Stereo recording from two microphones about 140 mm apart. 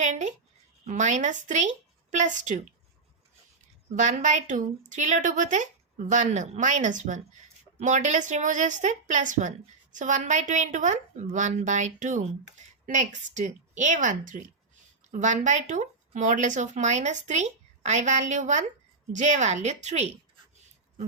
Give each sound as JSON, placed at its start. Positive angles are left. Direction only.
{"t": 0.0, "sound": "a woman's voice", "side_deg": -60}
{"t": 3.9, "sound": "speech", "side_deg": -60}